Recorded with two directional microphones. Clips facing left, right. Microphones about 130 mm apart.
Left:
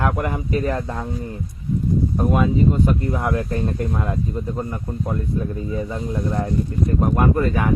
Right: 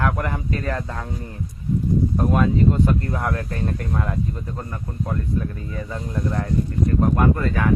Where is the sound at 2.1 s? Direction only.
5° left (ahead or behind).